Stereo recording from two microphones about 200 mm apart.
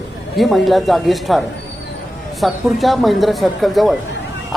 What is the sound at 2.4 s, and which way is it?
Speech, centre (ahead or behind).